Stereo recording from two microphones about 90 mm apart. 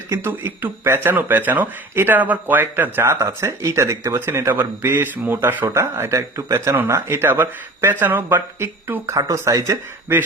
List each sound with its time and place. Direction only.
0.1 s speech: 25° right (ahead or behind)
10.1 s speech: 25° right (ahead or behind)